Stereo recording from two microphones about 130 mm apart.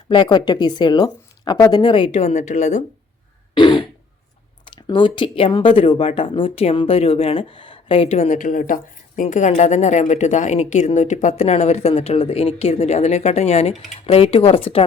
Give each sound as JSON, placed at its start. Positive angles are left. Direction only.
{"t": 0.1, "sound": "a woman's voice", "side_deg": 35}
{"t": 1.8, "sound": "a woman's voice", "side_deg": 40}
{"t": 3.5, "sound": "throat clearing", "side_deg": 35}
{"t": 4.6, "sound": "speech", "side_deg": 40}